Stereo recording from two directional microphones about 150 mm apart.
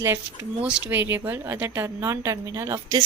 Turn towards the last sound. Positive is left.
turn(degrees=-20)  # may be behind; listen again after turning